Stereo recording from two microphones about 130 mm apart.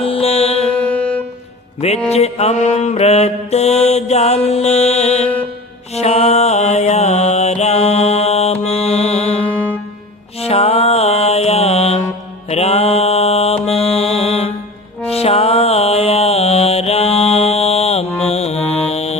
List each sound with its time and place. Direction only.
0.0 s music: 50° left (ahead or behind)
0.9 s music: 10° left (ahead or behind)
2.0 s mantra: 55° left (ahead or behind)
8.6 s music: 55° left (ahead or behind)